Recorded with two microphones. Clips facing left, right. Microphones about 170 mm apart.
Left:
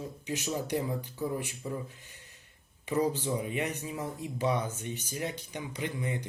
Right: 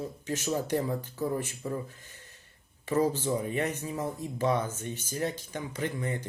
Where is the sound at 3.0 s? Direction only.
15° left (ahead or behind).